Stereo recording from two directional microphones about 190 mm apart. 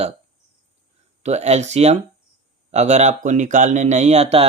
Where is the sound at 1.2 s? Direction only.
35° right (ahead or behind).